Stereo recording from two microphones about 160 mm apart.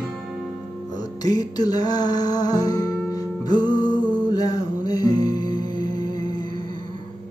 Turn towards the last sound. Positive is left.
turn(degrees=25)  # may be behind; listen again after turning